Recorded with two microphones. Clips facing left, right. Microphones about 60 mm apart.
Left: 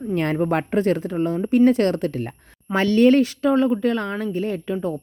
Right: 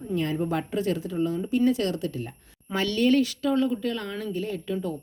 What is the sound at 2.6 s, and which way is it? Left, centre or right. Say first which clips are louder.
Speech: left 7 dB; left.